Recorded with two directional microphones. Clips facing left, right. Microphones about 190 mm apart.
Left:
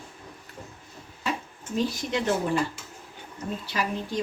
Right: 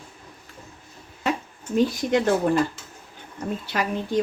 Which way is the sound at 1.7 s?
55° right (ahead or behind).